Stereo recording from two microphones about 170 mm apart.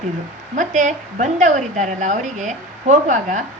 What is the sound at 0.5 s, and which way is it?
A woman's voice, 50° right (ahead or behind).